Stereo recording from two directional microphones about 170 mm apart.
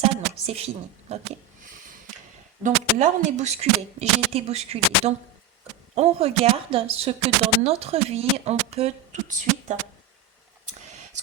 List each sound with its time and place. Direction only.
0.0 s a sound: 35° right (ahead or behind)
1.1 s speech: 40° right (ahead or behind)
2.6 s speech: 45° right (ahead or behind)